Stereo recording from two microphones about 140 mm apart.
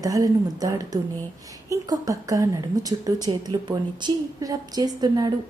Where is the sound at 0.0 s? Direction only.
25° right (ahead or behind).